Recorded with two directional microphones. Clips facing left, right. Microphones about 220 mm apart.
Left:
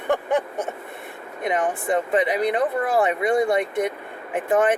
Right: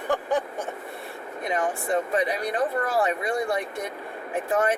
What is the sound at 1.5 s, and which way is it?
Speech, 20° left (ahead or behind).